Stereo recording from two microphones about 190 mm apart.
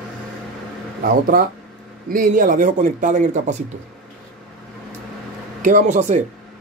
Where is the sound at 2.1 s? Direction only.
45° right (ahead or behind).